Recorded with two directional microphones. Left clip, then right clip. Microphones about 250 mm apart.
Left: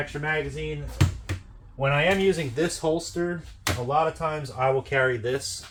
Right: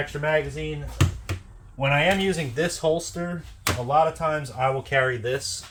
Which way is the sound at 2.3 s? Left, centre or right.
Centre.